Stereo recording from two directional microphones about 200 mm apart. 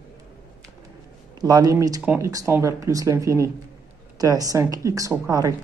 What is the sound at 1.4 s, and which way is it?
Speech, 20° right (ahead or behind).